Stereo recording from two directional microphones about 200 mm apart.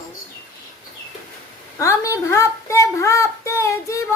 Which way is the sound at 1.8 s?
15° left (ahead or behind).